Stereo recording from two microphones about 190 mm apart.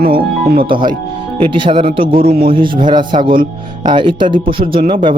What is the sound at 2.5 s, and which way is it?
Speech, 25° right (ahead or behind).